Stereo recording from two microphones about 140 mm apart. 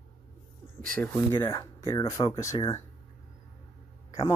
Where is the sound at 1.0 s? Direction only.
15° left (ahead or behind).